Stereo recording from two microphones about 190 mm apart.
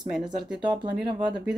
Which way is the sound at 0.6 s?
25° right (ahead or behind).